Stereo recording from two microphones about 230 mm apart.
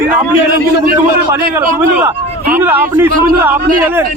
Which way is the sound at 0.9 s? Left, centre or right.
Centre.